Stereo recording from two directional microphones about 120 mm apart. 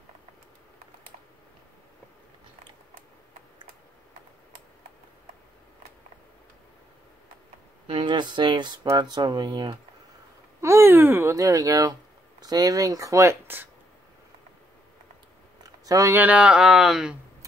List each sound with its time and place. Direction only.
7.8 s speech: 50° right (ahead or behind)
10.6 s a sound: 20° right (ahead or behind)
12.4 s speech: 35° right (ahead or behind)
15.8 s speech: 30° right (ahead or behind)
16.2 s speech: 10° right (ahead or behind)